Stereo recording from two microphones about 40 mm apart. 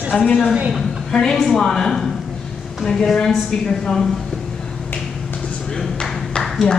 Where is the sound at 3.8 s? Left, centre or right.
Centre.